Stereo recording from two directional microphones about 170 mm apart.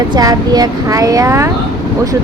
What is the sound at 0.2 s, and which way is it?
Speech, 20° right (ahead or behind).